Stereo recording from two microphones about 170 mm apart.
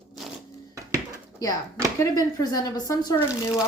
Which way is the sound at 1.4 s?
20° left (ahead or behind).